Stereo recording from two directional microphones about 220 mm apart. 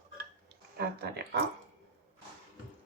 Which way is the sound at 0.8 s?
45° right (ahead or behind).